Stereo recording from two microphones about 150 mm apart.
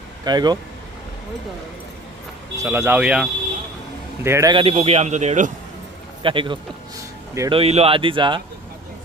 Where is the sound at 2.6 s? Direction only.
15° right (ahead or behind).